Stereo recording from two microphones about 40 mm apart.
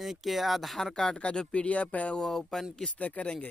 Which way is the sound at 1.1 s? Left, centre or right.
Left.